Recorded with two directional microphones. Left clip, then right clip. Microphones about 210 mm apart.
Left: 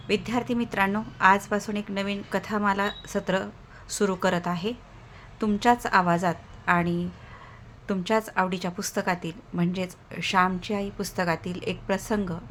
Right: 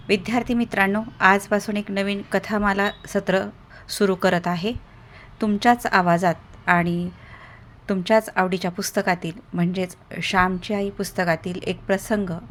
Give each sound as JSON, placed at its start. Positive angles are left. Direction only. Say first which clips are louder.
{"t": 0.1, "sound": "a woman's voice", "louder": "right 5 dB", "side_deg": -20}